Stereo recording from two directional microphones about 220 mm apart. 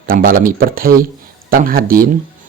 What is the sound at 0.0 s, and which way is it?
Speech, 40° right (ahead or behind).